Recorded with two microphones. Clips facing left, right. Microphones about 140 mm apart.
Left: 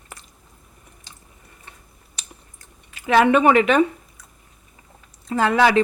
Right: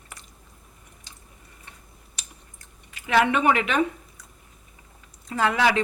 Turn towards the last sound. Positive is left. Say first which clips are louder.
# left 4 dB
turn(degrees=35)  # may be behind; listen again after turning